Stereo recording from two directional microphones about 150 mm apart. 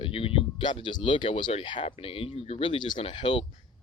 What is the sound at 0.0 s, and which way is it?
Speech, 40° left (ahead or behind).